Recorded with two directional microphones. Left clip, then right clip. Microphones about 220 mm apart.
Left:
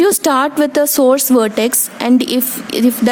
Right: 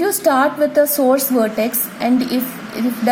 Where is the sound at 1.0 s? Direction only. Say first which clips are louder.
Left 4 dB; 45° left (ahead or behind).